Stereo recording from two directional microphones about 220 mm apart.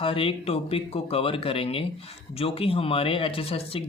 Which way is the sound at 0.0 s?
25° left (ahead or behind).